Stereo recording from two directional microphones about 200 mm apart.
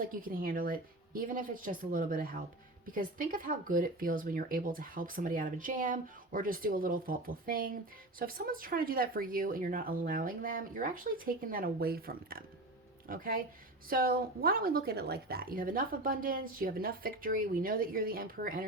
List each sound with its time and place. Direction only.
0.0 s speech: 45° right (ahead or behind)